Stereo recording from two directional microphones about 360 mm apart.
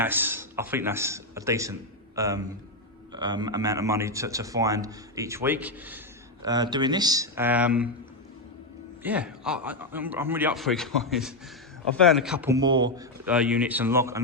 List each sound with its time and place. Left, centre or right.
0.0 s a man's voice: centre
9.0 s speech: centre